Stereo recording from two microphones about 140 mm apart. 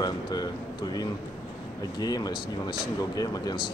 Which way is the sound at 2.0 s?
30° left (ahead or behind).